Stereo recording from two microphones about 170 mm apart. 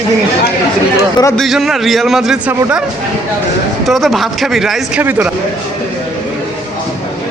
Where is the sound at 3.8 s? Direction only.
Centre (ahead or behind).